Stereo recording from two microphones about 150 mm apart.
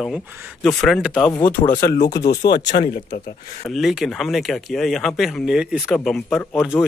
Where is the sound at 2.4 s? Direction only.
90° left.